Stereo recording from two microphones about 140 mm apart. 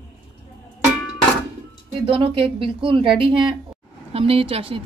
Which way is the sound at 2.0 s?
40° right (ahead or behind).